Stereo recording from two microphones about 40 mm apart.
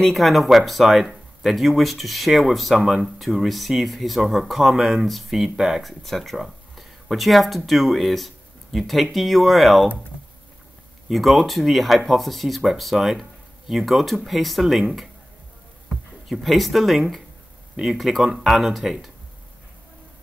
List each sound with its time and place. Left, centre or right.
0.1 s speech: centre
2.8 s speech: centre
3.4 s speech: centre
4.7 s speech: centre
5.0 s speech: centre
6.3 s speech: centre
11.1 s speech: centre
16.3 s speech: centre
18.3 s speech: centre